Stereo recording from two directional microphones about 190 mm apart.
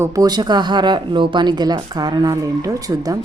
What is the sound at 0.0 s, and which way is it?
A woman's voice, 20° right (ahead or behind).